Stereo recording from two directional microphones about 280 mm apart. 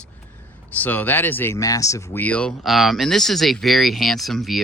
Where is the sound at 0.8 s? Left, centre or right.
Centre.